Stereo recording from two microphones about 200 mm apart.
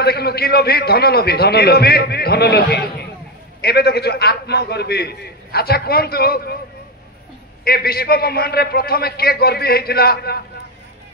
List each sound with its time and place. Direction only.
0.0 s a man's voice: 50° left (ahead or behind)
7.6 s a man's voice: 50° left (ahead or behind)